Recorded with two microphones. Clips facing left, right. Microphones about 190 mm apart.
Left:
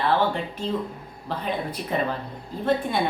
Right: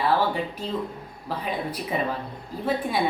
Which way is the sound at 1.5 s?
5° right (ahead or behind).